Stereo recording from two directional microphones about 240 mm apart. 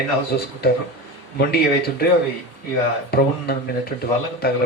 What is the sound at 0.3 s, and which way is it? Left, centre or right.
Speech, left.